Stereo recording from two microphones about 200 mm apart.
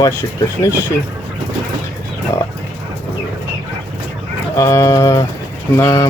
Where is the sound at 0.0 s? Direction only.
15° left (ahead or behind).